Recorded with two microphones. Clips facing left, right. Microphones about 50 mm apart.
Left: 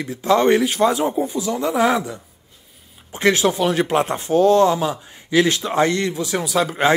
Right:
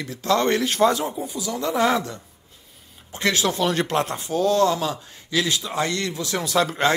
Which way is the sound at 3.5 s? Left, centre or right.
Centre.